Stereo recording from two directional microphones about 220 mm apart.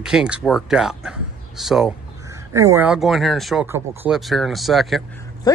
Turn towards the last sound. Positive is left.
turn(degrees=15)  # may be behind; listen again after turning